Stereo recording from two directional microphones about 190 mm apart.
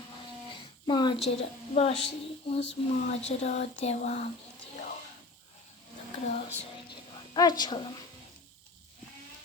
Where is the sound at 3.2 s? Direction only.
35° left (ahead or behind).